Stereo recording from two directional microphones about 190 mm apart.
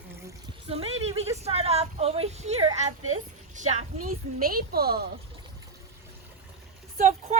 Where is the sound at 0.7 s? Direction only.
30° right (ahead or behind).